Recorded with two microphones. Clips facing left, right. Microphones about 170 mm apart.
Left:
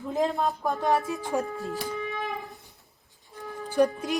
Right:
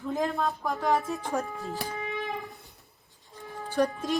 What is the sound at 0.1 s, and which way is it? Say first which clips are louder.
Speech: left 2 dB; 20° left (ahead or behind).